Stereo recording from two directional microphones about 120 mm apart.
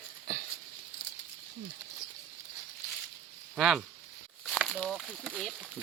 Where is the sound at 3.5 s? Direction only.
5° right (ahead or behind).